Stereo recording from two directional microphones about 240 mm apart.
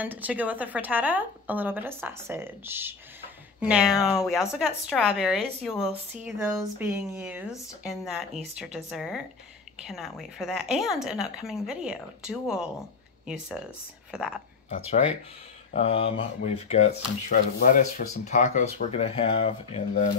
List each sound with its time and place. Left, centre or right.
0.0 s a woman's voice: centre
14.1 s speech: centre
15.7 s speech: left